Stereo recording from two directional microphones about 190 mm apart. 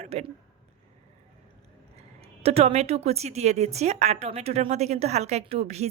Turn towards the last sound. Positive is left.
turn(degrees=-35)  # may be behind; listen again after turning